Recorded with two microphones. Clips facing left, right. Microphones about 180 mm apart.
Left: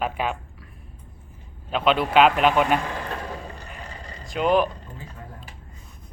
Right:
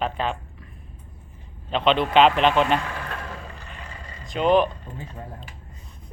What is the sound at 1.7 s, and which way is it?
Speech, 5° left (ahead or behind).